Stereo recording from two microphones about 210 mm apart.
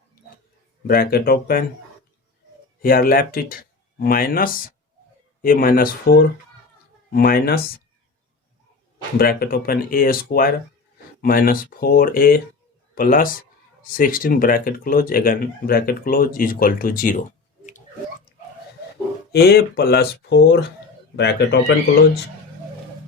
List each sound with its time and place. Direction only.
0.9 s speech: 45° left (ahead or behind)
2.8 s speech: 45° left (ahead or behind)
9.1 s speech: 45° left (ahead or behind)
19.3 s speech: 50° left (ahead or behind)